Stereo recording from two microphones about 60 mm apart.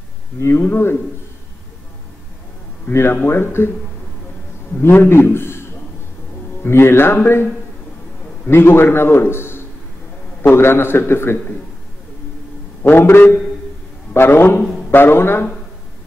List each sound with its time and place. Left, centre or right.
0.4 s a man's voice: left
2.9 s a man's voice: left
4.7 s a man's voice: left
8.5 s a man's voice: left
12.8 s a man's voice: left